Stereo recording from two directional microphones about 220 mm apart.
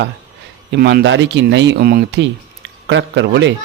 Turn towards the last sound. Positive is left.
turn(degrees=-55)  # may be behind; listen again after turning